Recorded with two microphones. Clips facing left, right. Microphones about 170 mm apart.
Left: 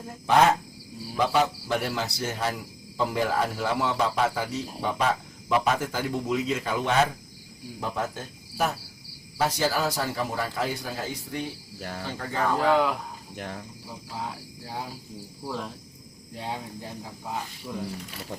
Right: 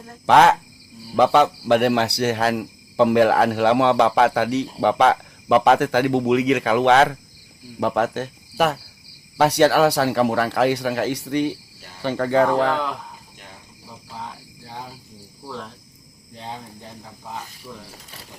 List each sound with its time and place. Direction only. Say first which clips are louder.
0.3 s speech: right 6 dB; 85° right
1.1 s speech: right 8 dB; 75° right (ahead or behind)
13.3 s cricket: left 9 dB; 70° left (ahead or behind)
14.2 s cricket: even; 5° left (ahead or behind)
15.4 s speech: left 1 dB; 10° left (ahead or behind)